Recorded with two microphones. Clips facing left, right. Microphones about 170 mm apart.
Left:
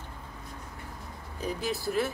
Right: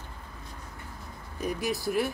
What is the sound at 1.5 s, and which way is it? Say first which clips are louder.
Speech: right 2 dB; 15° right (ahead or behind).